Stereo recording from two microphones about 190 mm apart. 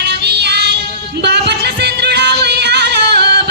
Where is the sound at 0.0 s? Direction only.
60° right (ahead or behind).